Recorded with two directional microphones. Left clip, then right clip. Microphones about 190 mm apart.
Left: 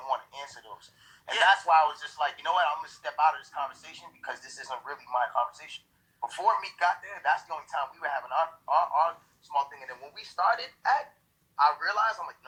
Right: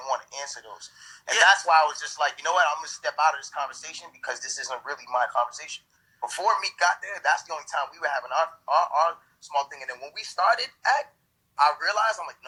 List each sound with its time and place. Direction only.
0.0 s a man's voice: 40° right (ahead or behind)